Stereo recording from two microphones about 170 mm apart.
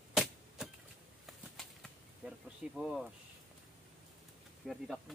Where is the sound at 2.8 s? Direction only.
Centre (ahead or behind).